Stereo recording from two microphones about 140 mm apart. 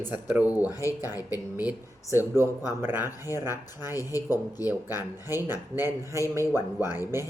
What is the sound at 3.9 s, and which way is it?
Speech, 25° left (ahead or behind).